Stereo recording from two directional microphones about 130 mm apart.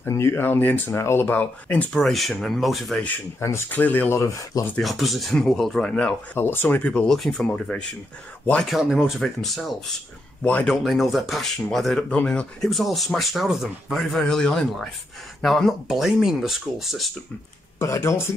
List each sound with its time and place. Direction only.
0.0 s speech: 20° left (ahead or behind); by 3.1 s centre (ahead or behind)
3.3 s speech: 20° left (ahead or behind)
4.7 s speech: centre (ahead or behind)
17.7 s speech: 20° left (ahead or behind)